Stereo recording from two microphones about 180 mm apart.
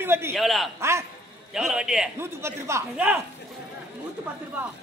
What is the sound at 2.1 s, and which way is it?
A man's voice, 15° right (ahead or behind).